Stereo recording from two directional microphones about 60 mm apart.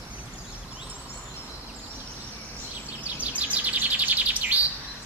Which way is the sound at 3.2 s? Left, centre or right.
Right.